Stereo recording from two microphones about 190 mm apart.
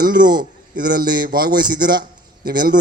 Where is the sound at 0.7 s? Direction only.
50° right (ahead or behind).